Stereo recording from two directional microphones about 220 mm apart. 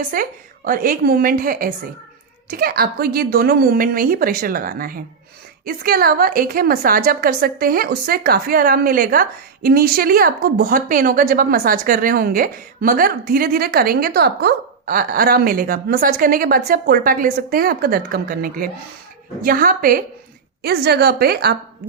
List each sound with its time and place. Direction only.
0.0 s a woman's voice: 40° right (ahead or behind)